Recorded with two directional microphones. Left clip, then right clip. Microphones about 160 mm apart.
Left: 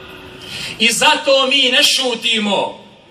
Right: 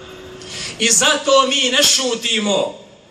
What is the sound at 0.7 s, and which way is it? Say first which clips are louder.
A man's voice: left 3 dB; 25° right (ahead or behind).